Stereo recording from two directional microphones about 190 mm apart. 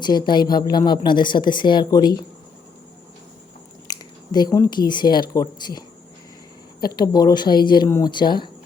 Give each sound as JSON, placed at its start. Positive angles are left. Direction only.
{"t": 0.3, "sound": "speech", "side_deg": 25}
{"t": 3.8, "sound": "speech", "side_deg": 20}
{"t": 6.8, "sound": "speech", "side_deg": 20}